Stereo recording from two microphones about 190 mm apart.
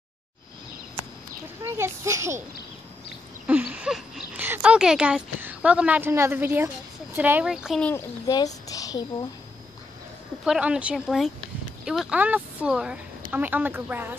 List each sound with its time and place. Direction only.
1.8 s a child's voice: 15° right (ahead or behind)
3.4 s a woman's voice: 10° right (ahead or behind)
7.9 s a child's voice: 20° left (ahead or behind)
8.6 s a sound: 20° left (ahead or behind)
10.4 s a woman's voice: 5° right (ahead or behind)